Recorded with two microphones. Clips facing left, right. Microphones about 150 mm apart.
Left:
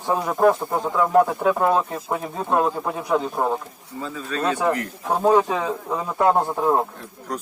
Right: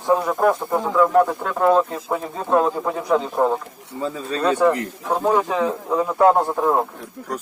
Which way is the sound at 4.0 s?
30° right (ahead or behind).